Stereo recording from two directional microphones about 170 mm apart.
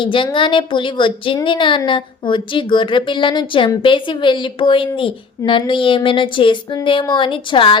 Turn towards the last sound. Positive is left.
turn(degrees=30)  # may be behind; listen again after turning